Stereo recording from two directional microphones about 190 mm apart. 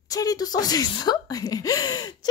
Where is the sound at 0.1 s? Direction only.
20° left (ahead or behind).